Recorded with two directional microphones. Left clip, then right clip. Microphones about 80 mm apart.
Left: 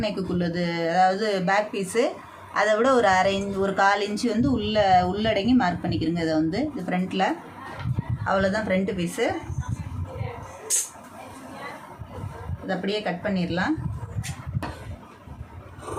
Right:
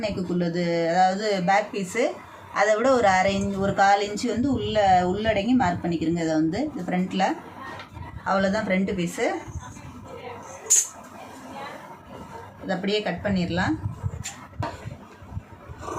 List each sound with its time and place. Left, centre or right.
0.0 s a woman's voice: left
3.6 s speech: left
7.1 s a woman's voice: left
12.6 s a woman's voice: centre